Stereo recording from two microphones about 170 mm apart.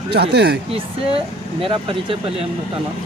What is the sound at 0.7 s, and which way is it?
Speech, 35° right (ahead or behind).